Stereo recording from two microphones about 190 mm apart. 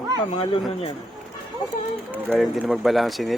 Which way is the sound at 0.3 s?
25° left (ahead or behind).